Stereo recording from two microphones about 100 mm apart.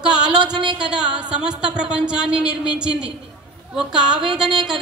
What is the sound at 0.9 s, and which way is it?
A woman's voice, 10° right (ahead or behind).